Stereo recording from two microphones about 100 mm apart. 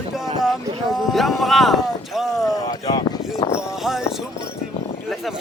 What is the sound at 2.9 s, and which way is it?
Speech, 45° left (ahead or behind).